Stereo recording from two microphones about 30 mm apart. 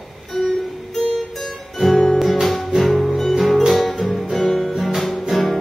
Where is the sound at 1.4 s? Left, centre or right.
Centre.